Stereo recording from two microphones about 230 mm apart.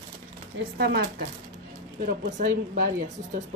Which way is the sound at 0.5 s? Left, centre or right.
Right.